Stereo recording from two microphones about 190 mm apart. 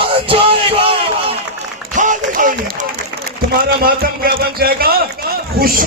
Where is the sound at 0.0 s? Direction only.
30° right (ahead or behind).